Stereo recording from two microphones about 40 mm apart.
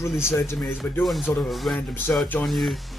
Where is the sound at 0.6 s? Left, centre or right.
Left.